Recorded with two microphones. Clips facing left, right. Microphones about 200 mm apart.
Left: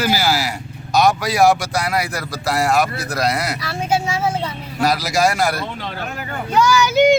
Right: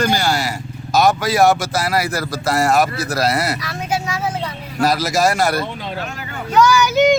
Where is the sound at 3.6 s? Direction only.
30° left (ahead or behind).